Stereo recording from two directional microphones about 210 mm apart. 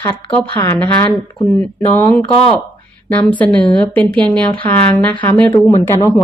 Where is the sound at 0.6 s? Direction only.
10° left (ahead or behind).